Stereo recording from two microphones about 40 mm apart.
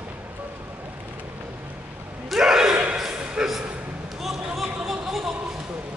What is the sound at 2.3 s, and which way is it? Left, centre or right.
Gasp, centre.